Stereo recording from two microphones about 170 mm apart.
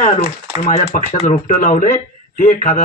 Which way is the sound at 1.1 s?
45° left (ahead or behind).